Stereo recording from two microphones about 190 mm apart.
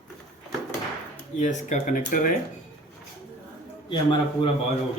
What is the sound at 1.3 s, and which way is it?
Speech, 40° left (ahead or behind).